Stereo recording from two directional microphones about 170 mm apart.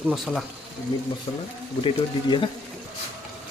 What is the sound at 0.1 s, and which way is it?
Speech, centre (ahead or behind).